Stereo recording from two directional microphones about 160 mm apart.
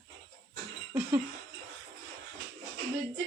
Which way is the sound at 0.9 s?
15° right (ahead or behind).